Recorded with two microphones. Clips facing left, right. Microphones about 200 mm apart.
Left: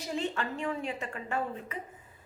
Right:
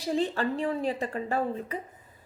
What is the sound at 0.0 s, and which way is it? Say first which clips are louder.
A woman's voice: right 6 dB; 35° right (ahead or behind).